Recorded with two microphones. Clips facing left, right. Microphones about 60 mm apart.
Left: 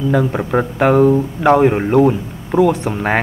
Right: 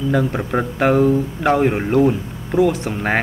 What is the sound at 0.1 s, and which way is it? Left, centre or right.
Speech, centre.